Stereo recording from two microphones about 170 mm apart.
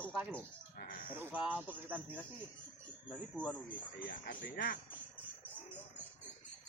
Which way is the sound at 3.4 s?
10° left (ahead or behind).